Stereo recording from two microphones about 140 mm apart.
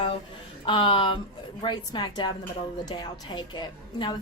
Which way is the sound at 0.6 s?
35° left (ahead or behind).